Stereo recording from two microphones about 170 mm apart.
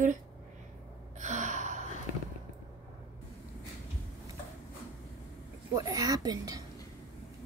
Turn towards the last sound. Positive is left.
turn(degrees=-20)  # may be behind; listen again after turning